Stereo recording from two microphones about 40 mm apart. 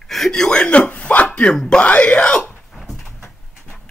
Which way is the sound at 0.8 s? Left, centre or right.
Left.